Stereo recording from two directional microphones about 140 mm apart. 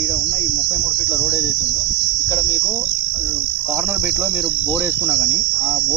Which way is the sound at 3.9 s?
20° right (ahead or behind).